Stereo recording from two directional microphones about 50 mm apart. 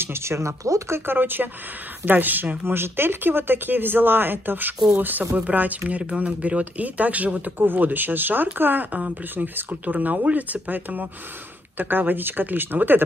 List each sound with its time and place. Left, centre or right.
0.0 s speech: right
1.0 s speech: right
2.6 s speech: right
7.5 s speech: right